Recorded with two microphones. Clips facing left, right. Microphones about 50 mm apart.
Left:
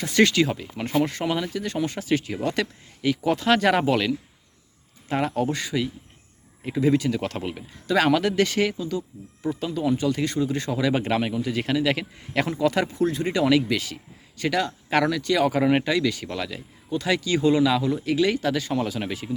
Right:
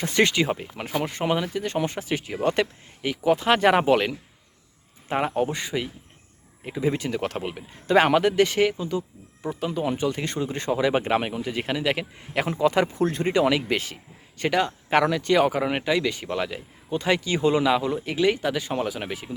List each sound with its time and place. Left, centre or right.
0.0 s speech: right
2.4 s speech: right
6.7 s speech: centre
6.9 s speech: right
7.7 s speech: right
9.6 s speech: right; by 12.5 s centre
12.5 s speech: right
15.8 s speech: right